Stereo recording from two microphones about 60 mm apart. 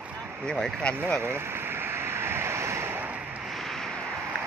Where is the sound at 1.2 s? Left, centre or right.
Right.